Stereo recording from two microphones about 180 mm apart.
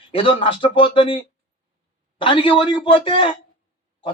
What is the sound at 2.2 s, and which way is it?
Speech, 30° left (ahead or behind).